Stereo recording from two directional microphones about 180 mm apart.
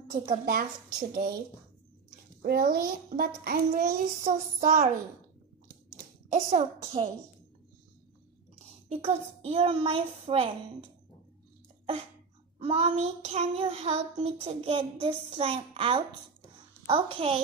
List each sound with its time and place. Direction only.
0.5 s a child's voice: 55° right (ahead or behind)
2.4 s a child's voice: 55° right (ahead or behind)
4.2 s child singing: 40° right (ahead or behind)
6.3 s child singing: 40° right (ahead or behind)
8.8 s child singing: 35° right (ahead or behind)
12.5 s child singing: 35° right (ahead or behind)